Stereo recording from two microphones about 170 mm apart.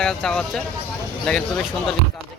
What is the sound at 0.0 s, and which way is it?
Speech, 5° left (ahead or behind).